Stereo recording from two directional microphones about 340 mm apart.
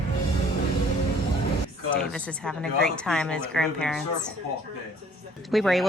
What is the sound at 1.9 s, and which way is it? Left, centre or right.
A woman's voice, centre.